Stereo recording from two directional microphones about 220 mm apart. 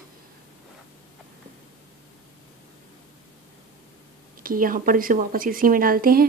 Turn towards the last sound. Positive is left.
turn(degrees=-40)  # may be behind; listen again after turning